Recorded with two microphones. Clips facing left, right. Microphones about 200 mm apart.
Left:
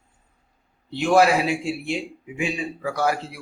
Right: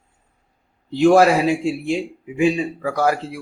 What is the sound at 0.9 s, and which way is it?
Speech, 45° right (ahead or behind).